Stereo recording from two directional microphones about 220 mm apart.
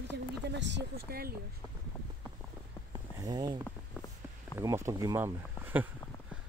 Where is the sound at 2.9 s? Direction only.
15° right (ahead or behind).